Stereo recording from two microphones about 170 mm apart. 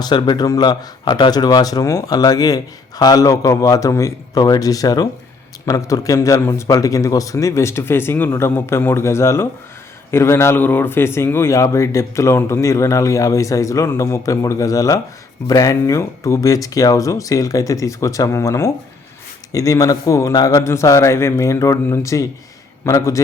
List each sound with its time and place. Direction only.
0.0 s speech: 25° left (ahead or behind)